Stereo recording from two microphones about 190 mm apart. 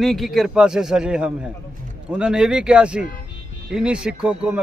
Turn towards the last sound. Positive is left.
turn(degrees=-5)  # may be behind; listen again after turning